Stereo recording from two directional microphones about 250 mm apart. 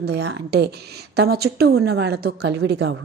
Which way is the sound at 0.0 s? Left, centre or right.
Right.